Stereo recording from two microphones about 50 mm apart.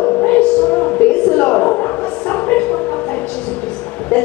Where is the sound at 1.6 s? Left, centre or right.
Left.